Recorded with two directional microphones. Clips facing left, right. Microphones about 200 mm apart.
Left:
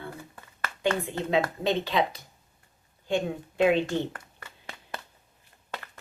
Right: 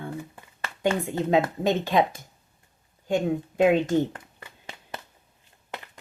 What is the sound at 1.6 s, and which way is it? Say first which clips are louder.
Speech: right 3 dB; 45° right (ahead or behind).